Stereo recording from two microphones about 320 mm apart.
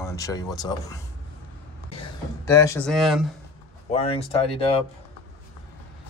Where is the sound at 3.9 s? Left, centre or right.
Centre.